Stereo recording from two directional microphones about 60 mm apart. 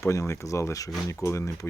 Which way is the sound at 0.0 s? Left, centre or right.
Left.